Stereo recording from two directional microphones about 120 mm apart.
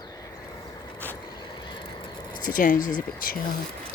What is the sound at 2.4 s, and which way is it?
Speech, 90° left.